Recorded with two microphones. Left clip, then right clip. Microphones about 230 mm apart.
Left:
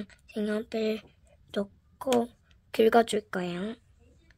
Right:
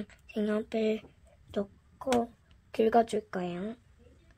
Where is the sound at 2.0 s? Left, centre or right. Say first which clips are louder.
Left 2 dB; left.